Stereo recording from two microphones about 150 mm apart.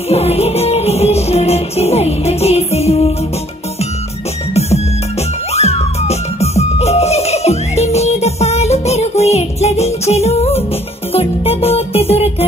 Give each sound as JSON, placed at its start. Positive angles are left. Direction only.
{"t": 0.1, "sound": "music", "side_deg": 45}
{"t": 4.6, "sound": "music", "side_deg": 45}